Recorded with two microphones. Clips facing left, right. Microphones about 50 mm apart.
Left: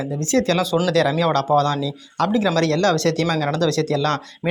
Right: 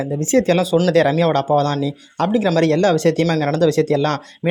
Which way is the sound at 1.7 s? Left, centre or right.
Right.